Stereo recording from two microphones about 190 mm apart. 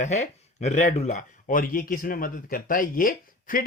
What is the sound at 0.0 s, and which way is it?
Speech, 35° left (ahead or behind).